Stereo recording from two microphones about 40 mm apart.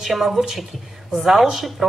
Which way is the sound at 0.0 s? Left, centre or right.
Centre.